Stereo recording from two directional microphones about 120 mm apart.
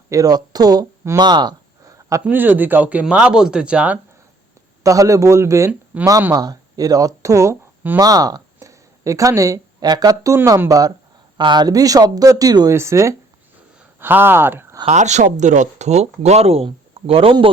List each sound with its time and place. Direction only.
0.1 s speech: 30° right (ahead or behind)
1.2 s a sound: 35° right (ahead or behind)
2.2 s speech: 15° right (ahead or behind)
4.8 s speech: 30° right (ahead or behind)
5.9 s speech: 10° right (ahead or behind)
6.3 s speech: 30° right (ahead or behind)
14.8 s speech: 75° right (ahead or behind); by 17.5 s 50° right (ahead or behind)